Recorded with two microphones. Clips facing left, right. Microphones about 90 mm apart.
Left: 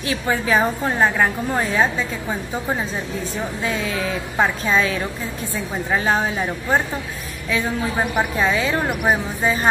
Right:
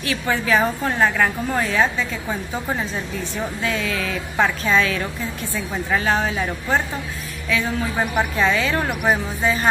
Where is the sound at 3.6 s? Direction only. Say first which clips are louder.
Left 1 dB; 20° left (ahead or behind).